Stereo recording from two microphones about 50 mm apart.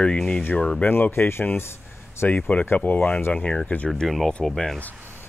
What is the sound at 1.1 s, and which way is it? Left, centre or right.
Speech, left.